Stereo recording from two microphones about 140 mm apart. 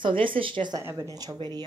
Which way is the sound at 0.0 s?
35° right (ahead or behind).